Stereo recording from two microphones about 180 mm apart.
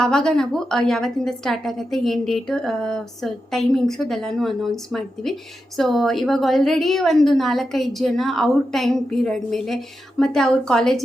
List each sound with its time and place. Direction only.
0.0 s a woman's voice: 5° left (ahead or behind)